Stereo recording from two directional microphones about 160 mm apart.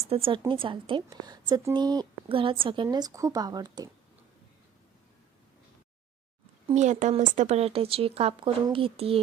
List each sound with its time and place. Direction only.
0.1 s a woman's voice: 35° right (ahead or behind)
6.7 s speech: 45° right (ahead or behind)